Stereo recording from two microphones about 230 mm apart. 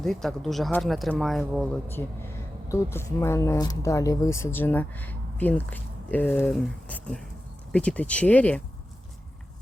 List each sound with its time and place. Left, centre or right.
0.0 s speech: centre